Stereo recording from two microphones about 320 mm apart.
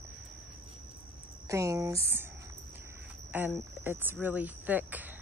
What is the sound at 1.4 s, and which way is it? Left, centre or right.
Speech, centre.